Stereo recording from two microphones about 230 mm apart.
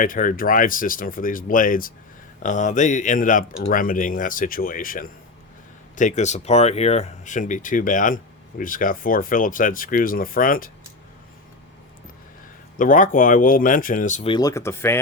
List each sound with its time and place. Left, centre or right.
0.0 s speech: left
12.7 s speech: left
14.3 s speech: centre